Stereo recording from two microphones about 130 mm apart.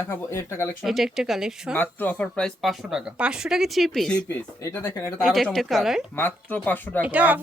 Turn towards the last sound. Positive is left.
turn(degrees=-10)  # may be behind; listen again after turning